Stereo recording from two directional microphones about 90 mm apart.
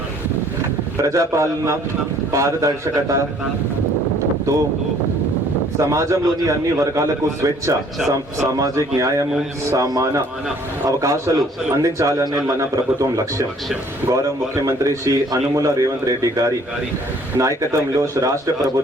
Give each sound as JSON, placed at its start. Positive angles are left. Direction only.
{"t": 1.0, "sound": "a man's voice", "side_deg": -35}
{"t": 5.8, "sound": "a man's voice", "side_deg": -35}
{"t": 17.7, "sound": "a man's voice", "side_deg": -35}